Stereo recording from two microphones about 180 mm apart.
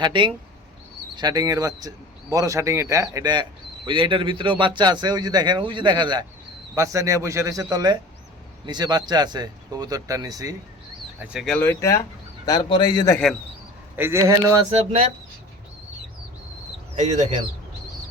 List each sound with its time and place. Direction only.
0.0 s a man's voice: 25° right (ahead or behind)
11.2 s a man's voice: 5° right (ahead or behind); by 13.1 s 25° left (ahead or behind)
13.9 s speech: 15° right (ahead or behind)
14.7 s speech: 35° right (ahead or behind)
16.9 s speech: 40° right (ahead or behind)